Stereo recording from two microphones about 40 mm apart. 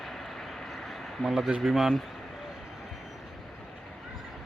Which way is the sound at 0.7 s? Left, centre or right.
Centre.